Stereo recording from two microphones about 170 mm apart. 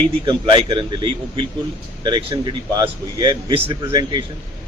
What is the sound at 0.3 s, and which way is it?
A man's voice, 30° right (ahead or behind).